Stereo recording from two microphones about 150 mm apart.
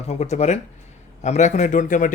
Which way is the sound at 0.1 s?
50° left (ahead or behind).